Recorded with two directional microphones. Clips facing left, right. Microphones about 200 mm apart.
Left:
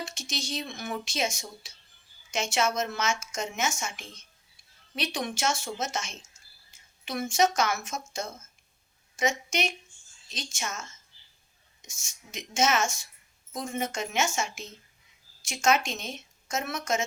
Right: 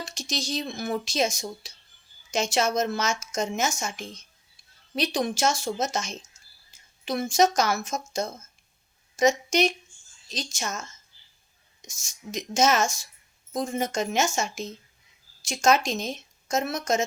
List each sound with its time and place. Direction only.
0.0 s a woman's voice: 35° right (ahead or behind)